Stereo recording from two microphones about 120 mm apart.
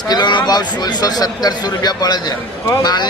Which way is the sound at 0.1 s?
35° left (ahead or behind).